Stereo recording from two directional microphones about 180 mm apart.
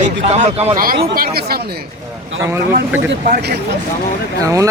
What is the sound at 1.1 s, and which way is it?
Speech, 55° right (ahead or behind).